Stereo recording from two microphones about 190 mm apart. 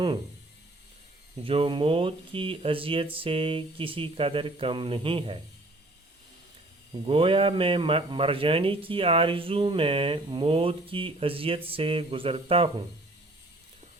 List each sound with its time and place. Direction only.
1.4 s speech: 30° right (ahead or behind)
6.9 s speech: 30° right (ahead or behind)